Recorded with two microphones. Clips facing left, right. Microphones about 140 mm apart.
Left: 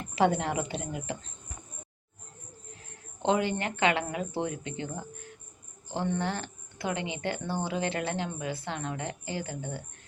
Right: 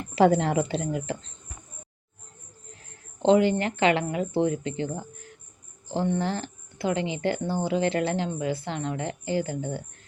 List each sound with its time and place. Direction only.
0.2 s speech: 35° right (ahead or behind)
3.2 s speech: 30° right (ahead or behind)
6.1 s speech: 30° right (ahead or behind)